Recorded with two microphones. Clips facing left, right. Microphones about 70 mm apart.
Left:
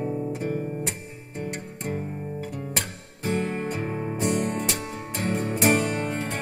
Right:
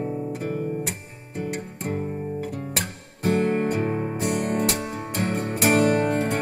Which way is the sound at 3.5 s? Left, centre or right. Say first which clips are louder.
Right 6 dB; right.